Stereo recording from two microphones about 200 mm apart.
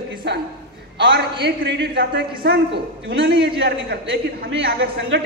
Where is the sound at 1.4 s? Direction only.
60° right (ahead or behind).